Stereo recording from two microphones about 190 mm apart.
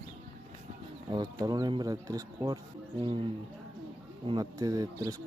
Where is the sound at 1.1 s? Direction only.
20° right (ahead or behind).